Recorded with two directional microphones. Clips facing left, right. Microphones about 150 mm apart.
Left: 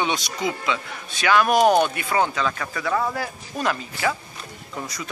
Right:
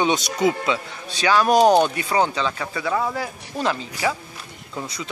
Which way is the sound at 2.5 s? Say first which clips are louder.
Right 1 dB; 10° right (ahead or behind).